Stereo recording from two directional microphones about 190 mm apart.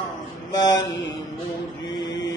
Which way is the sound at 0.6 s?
20° left (ahead or behind).